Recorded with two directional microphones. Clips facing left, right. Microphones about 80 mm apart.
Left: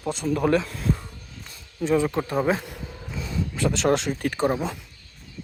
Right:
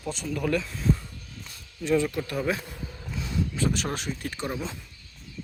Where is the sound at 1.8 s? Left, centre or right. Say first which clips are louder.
Left 3 dB; left.